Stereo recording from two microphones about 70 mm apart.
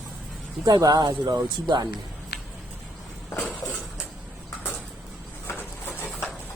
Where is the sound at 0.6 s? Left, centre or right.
Right.